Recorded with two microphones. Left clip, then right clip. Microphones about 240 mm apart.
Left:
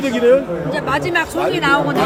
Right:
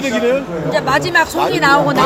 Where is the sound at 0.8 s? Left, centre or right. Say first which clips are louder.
Right 4 dB; right.